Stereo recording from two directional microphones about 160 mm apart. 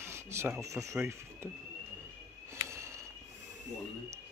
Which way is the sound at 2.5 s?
15° right (ahead or behind).